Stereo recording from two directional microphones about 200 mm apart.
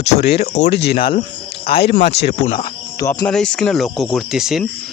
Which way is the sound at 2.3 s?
30° left (ahead or behind).